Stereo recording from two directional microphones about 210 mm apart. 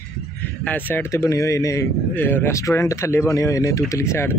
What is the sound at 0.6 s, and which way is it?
Speech, 10° left (ahead or behind).